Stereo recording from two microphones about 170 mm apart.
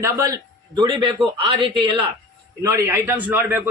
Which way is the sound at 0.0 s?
20° right (ahead or behind).